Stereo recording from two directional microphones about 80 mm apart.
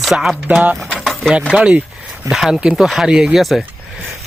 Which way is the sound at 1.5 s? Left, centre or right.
Centre.